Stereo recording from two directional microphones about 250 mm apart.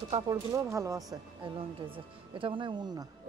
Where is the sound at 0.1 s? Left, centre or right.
Centre.